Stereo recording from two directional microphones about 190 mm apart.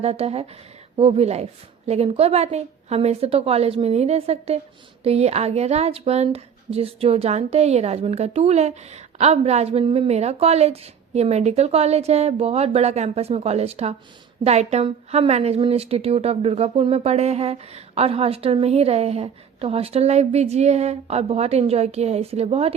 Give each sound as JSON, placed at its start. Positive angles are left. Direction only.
{"t": 0.0, "sound": "a woman's voice", "side_deg": -35}